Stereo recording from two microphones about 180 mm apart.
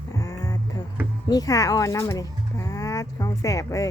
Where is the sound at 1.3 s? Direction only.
20° left (ahead or behind).